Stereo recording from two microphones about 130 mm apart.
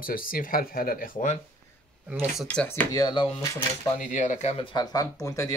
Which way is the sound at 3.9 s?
80° left.